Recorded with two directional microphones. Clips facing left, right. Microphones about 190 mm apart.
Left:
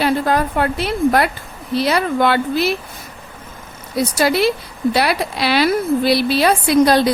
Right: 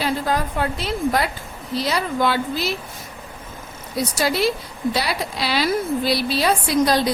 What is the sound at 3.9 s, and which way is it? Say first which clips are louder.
A woman's voice: left 5 dB; 65° left (ahead or behind).